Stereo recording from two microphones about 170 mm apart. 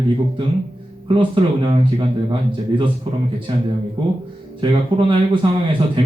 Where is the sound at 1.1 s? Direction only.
30° right (ahead or behind).